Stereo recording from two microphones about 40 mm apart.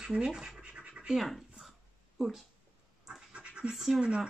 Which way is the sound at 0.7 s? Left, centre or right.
Right.